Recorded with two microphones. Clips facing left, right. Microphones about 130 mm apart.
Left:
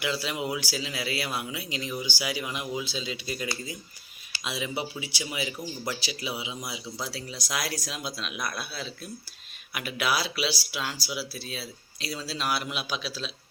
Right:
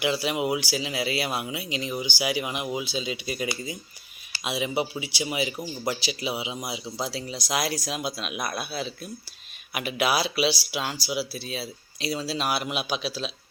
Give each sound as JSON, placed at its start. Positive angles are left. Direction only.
{"t": 0.0, "sound": "speech", "side_deg": -15}